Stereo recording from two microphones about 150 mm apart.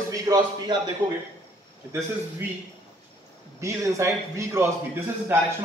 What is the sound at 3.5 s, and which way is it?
A man's voice, 20° right (ahead or behind).